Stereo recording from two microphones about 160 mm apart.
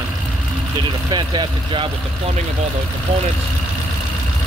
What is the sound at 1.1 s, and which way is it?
Speech, 30° right (ahead or behind).